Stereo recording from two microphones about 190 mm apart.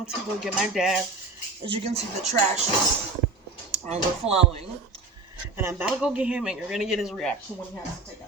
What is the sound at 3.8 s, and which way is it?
Speech, 30° right (ahead or behind).